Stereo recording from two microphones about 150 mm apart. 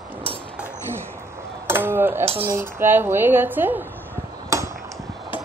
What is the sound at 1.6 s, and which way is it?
Speech, 15° right (ahead or behind).